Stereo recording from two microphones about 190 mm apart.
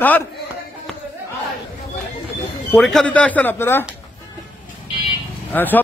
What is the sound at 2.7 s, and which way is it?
Speech, centre (ahead or behind).